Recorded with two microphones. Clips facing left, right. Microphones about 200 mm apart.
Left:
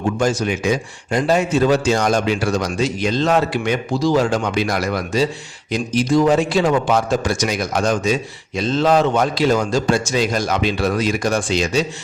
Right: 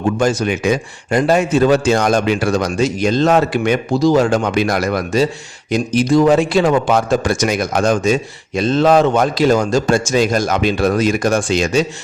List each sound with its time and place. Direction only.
0.2 s a man's voice: 60° right (ahead or behind)